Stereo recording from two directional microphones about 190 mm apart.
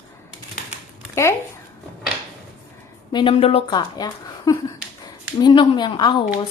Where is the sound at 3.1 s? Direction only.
25° left (ahead or behind).